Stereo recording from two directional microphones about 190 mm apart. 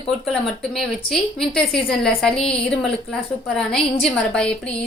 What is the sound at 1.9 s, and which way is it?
A woman's voice, 5° left (ahead or behind).